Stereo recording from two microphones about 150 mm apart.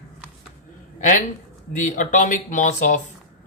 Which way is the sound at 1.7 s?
60° left (ahead or behind).